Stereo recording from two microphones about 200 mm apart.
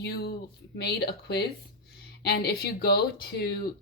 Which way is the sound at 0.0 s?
55° left (ahead or behind).